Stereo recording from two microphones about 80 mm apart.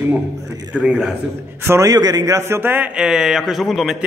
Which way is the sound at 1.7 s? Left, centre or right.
Right.